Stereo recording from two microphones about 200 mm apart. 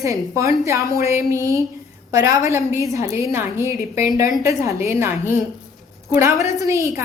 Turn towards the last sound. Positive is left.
turn(degrees=-15)  # may be behind; listen again after turning